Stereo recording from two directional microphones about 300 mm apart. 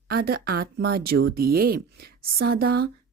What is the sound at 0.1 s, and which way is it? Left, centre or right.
Speech, right.